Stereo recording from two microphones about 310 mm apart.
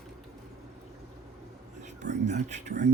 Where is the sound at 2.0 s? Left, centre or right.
Right.